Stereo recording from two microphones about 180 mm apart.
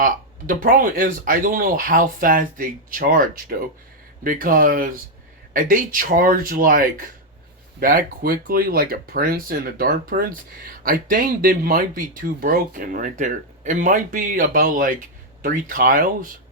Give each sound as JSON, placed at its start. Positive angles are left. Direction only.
{"t": 0.0, "sound": "speech", "side_deg": -50}